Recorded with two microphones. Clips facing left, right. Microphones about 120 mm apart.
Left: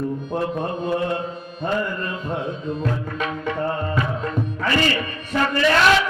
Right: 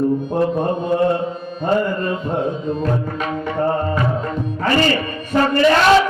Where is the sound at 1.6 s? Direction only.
45° right (ahead or behind).